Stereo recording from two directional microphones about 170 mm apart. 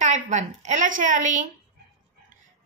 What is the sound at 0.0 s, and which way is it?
A woman's voice, 45° right (ahead or behind).